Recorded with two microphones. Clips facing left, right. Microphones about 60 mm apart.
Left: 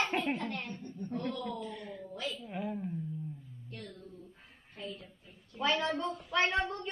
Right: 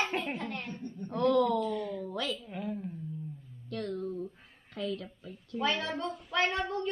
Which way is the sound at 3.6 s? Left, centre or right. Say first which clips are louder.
Right 13 dB; right.